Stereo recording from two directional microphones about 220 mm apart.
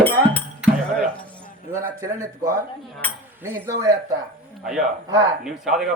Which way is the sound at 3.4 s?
10° right (ahead or behind).